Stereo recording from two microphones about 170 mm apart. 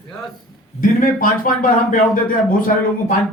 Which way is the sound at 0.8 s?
55° left (ahead or behind).